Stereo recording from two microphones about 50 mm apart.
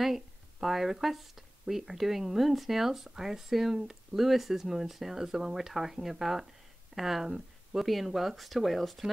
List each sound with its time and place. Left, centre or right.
0.0 s speech: centre